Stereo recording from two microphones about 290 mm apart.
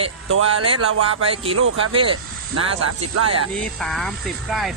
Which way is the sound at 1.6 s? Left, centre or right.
Right.